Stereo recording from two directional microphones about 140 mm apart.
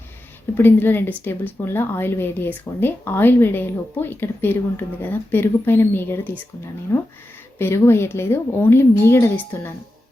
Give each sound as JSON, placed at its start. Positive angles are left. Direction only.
{"t": 0.5, "sound": "speech", "side_deg": 15}